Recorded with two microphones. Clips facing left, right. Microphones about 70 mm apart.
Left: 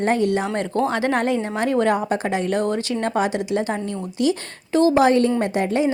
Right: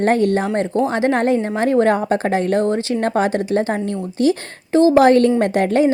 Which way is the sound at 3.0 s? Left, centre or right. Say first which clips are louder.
Right 3 dB; right.